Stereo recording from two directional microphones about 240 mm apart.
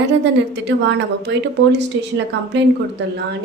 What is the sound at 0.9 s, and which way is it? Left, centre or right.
Speech, right.